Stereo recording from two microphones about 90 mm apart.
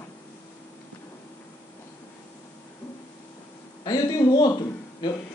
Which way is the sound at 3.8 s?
45° left (ahead or behind).